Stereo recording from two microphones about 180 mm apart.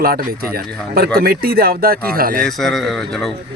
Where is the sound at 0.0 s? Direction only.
55° right (ahead or behind).